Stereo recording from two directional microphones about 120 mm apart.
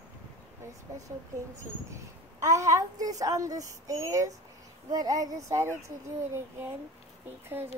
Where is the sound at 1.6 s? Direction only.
25° right (ahead or behind).